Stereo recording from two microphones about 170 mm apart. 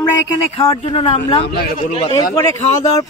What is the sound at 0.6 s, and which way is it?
Speech, 35° left (ahead or behind).